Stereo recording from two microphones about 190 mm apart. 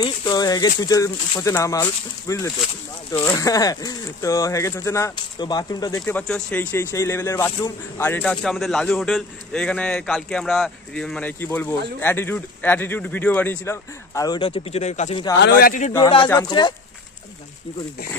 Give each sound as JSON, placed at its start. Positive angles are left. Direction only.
{"t": 0.0, "sound": "speech", "side_deg": 20}
{"t": 6.0, "sound": "speech", "side_deg": 5}
{"t": 15.3, "sound": "speech", "side_deg": 65}
{"t": 16.3, "sound": "speech", "side_deg": 20}